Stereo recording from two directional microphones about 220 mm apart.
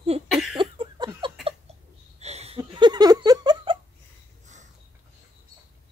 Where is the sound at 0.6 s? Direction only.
20° right (ahead or behind).